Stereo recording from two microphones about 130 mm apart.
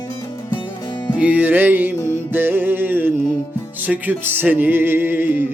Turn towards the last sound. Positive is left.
turn(degrees=-15)  # may be behind; listen again after turning